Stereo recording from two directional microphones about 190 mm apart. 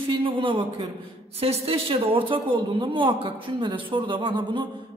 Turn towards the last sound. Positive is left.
turn(degrees=-25)  # may be behind; listen again after turning